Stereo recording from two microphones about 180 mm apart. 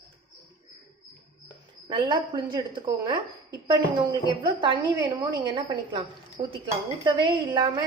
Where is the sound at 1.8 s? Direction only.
25° right (ahead or behind).